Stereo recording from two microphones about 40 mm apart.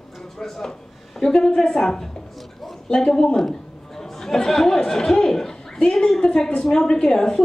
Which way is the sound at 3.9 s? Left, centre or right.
Centre.